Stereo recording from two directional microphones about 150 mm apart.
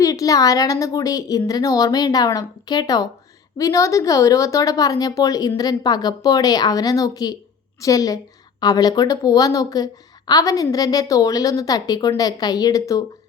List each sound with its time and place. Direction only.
0.0 s a woman's voice: 25° left (ahead or behind)